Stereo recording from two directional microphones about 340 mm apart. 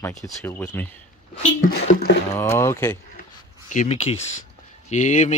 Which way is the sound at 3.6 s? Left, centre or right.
Left.